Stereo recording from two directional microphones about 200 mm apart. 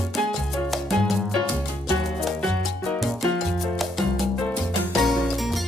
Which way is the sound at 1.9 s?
Centre (ahead or behind).